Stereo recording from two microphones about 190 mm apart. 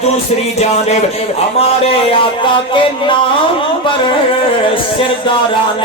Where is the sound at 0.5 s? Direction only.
35° left (ahead or behind).